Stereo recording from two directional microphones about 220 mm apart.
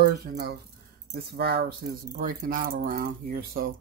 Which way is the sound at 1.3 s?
45° right (ahead or behind).